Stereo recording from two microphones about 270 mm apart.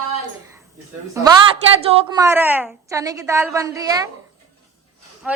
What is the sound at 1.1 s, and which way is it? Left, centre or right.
Speech, centre.